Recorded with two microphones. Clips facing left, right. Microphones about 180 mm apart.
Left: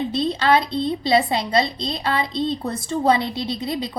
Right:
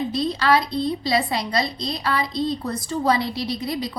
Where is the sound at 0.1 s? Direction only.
25° left (ahead or behind).